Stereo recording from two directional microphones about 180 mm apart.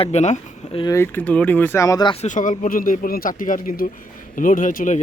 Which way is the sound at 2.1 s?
45° left (ahead or behind).